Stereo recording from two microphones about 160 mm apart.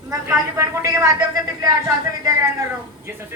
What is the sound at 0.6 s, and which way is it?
Speech, 20° right (ahead or behind).